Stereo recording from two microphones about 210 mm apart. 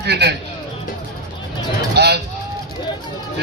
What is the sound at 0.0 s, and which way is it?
Speech, 50° right (ahead or behind).